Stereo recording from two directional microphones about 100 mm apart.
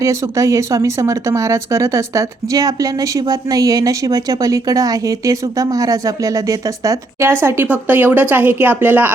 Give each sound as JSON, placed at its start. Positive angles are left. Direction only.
{"t": 0.0, "sound": "speech", "side_deg": -30}